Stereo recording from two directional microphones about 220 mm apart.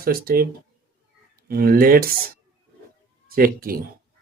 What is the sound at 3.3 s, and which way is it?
Speech, 40° right (ahead or behind).